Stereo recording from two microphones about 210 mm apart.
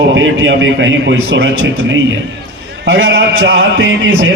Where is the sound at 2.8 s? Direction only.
55° right (ahead or behind).